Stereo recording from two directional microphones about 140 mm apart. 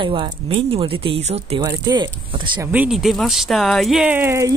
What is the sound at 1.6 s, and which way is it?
Speech, 30° right (ahead or behind).